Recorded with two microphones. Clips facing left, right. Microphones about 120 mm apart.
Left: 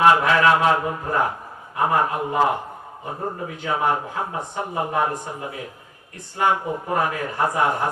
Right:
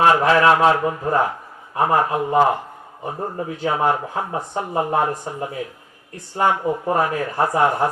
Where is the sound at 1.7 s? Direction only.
35° right (ahead or behind).